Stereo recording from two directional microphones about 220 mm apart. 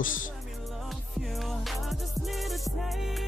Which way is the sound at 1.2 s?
Centre (ahead or behind).